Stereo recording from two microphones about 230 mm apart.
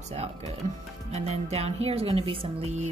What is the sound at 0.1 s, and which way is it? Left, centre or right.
Speech, right.